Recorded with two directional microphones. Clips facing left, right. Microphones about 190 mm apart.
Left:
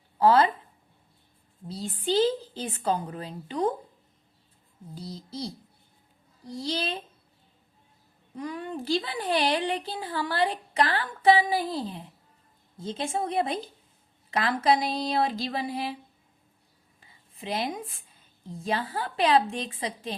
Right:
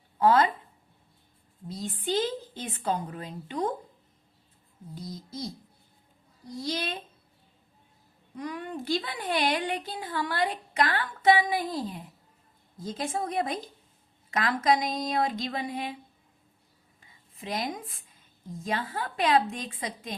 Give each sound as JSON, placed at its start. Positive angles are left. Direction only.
{"t": 0.2, "sound": "speech", "side_deg": 30}
{"t": 1.6, "sound": "speech", "side_deg": 30}
{"t": 4.9, "sound": "speech", "side_deg": 30}
{"t": 6.5, "sound": "a woman's voice", "side_deg": 30}
{"t": 8.4, "sound": "a woman's voice", "side_deg": 30}
{"t": 17.0, "sound": "a woman's voice", "side_deg": 30}